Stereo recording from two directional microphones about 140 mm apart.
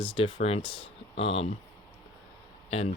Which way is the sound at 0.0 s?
40° left (ahead or behind).